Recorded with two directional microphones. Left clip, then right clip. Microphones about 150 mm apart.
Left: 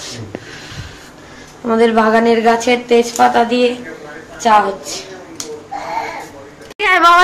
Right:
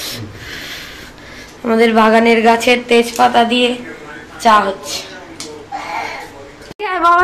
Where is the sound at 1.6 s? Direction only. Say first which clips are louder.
Right 1 dB; 5° right (ahead or behind).